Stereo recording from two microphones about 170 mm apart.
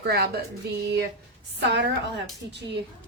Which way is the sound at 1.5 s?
85° right.